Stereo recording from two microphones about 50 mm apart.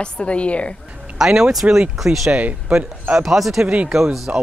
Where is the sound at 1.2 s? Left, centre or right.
Centre.